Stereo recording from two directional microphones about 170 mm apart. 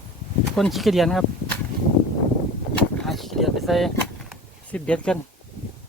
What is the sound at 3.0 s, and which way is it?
Speech, centre (ahead or behind).